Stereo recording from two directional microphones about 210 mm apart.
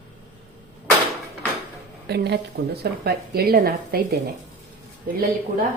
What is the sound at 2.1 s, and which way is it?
A woman's voice, 50° right (ahead or behind).